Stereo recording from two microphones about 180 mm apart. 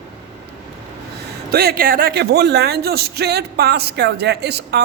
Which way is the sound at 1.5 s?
55° right (ahead or behind).